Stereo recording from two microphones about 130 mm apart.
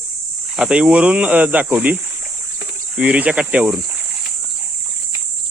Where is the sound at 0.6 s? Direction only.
5° right (ahead or behind).